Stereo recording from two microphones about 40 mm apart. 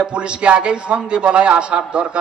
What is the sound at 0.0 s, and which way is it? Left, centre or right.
A man's voice, right.